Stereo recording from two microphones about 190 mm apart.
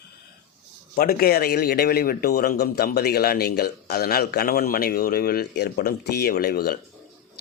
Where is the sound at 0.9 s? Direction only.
55° left (ahead or behind).